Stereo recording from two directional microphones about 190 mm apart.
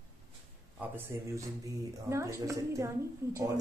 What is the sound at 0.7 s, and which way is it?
Speech, 10° right (ahead or behind).